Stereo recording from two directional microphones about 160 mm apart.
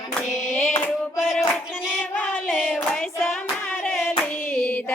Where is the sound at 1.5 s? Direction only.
Centre (ahead or behind).